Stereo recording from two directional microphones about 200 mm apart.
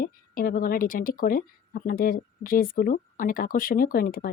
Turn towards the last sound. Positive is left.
turn(degrees=45)  # may be behind; listen again after turning